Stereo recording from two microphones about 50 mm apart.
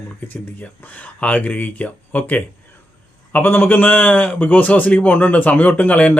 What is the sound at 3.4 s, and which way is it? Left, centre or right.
Speech, left.